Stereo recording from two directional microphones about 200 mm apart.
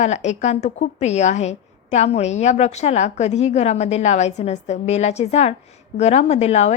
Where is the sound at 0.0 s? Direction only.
35° left (ahead or behind).